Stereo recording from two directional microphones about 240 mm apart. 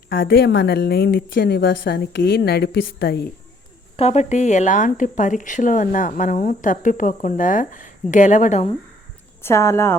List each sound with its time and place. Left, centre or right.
0.1 s speech: left
3.9 s speech: left
9.4 s speech: centre